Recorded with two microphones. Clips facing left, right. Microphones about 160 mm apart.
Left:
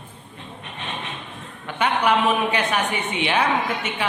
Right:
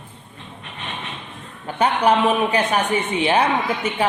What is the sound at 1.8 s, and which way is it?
A woman's voice, 35° right (ahead or behind).